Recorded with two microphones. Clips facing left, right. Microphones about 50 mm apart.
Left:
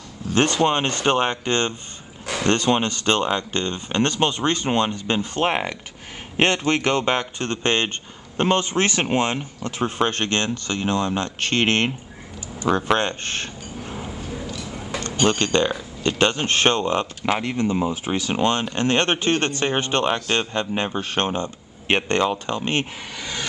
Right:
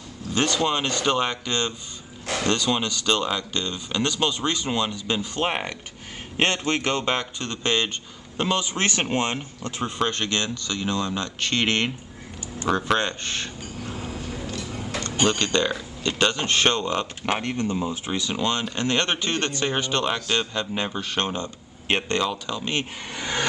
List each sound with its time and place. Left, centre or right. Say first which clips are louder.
0.3 s speech: left 4 dB; left
5.5 s speech: left 4 dB; centre
6.3 s speech: left 4 dB; left
13.8 s a sound: left 1 dB; left
15.2 s speech: left 3 dB; left
23.1 s a sound: right 4 dB; right